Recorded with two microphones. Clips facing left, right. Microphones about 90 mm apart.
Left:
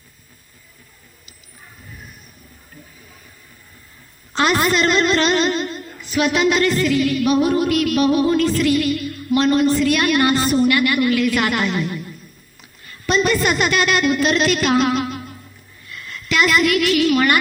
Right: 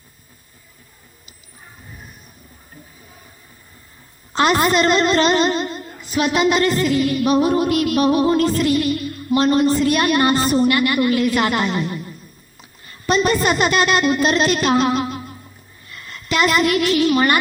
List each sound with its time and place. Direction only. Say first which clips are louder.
4.4 s speech: right 1 dB; 40° right (ahead or behind)